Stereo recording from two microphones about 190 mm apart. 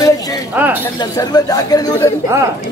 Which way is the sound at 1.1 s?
20° left (ahead or behind).